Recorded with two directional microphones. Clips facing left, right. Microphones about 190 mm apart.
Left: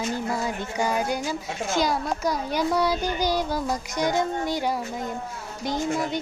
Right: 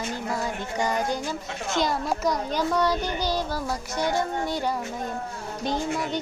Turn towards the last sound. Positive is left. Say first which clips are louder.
# left 1 dB
turn(degrees=10)  # may be behind; listen again after turning